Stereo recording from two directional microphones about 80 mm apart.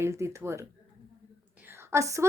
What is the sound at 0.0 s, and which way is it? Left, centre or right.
Speech, right.